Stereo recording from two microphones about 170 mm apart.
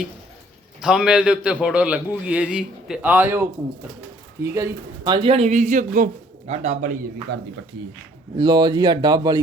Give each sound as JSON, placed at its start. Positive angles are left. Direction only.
{"t": 0.8, "sound": "a man's voice", "side_deg": -5}
{"t": 4.5, "sound": "a man's voice", "side_deg": -20}
{"t": 5.1, "sound": "a man's voice", "side_deg": -35}
{"t": 8.4, "sound": "speech", "side_deg": -25}